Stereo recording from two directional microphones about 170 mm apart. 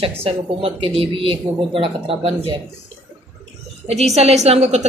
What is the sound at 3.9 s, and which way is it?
Speech, 40° right (ahead or behind).